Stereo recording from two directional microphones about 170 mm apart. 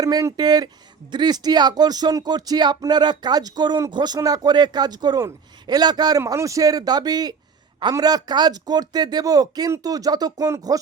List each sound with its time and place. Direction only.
0.0 s speech: 20° right (ahead or behind)